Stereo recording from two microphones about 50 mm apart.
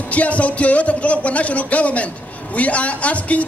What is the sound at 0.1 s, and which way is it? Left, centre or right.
A man's voice, left.